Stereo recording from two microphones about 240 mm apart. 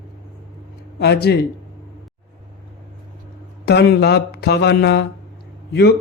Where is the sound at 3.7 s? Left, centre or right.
Left.